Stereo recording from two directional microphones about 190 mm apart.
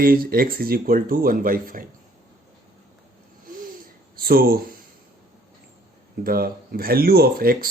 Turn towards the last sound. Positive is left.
turn(degrees=-50)  # may be behind; listen again after turning